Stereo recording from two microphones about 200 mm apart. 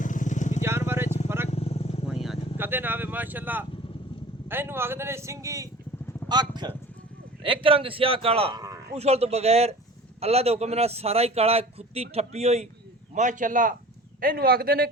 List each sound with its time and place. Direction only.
0.0 s vehicle: 40° left (ahead or behind)
0.6 s vehicle: 10° right (ahead or behind)
1.5 s vehicle: 30° left (ahead or behind)
2.1 s vehicle: centre (ahead or behind)
2.6 s a man's voice: 10° right (ahead or behind); by 14.8 s 50° right (ahead or behind)